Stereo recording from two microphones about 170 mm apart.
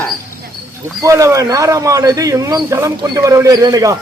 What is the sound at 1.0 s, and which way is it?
Speech, 20° right (ahead or behind).